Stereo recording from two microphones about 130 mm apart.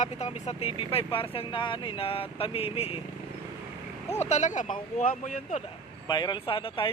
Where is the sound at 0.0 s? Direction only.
60° left (ahead or behind).